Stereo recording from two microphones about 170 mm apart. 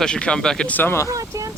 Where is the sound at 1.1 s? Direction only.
20° right (ahead or behind).